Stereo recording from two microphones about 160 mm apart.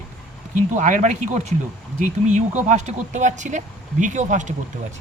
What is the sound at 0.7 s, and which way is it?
Speech, 50° right (ahead or behind).